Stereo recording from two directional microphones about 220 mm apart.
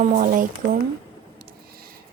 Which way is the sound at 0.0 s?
35° right (ahead or behind).